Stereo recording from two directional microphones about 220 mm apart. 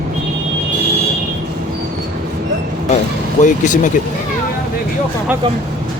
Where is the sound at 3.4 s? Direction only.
35° left (ahead or behind).